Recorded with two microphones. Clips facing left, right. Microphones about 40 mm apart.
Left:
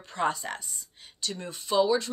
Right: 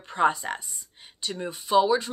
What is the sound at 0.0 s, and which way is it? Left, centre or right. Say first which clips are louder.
Speech: right 5 dB; centre.